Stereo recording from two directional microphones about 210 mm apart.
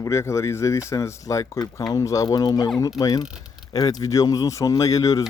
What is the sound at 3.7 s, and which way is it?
Speech, 20° left (ahead or behind).